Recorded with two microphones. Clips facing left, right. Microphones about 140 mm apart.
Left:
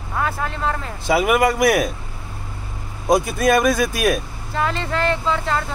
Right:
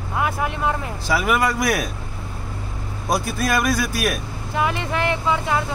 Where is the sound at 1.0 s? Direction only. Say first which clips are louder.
Left 4 dB; 20° left (ahead or behind).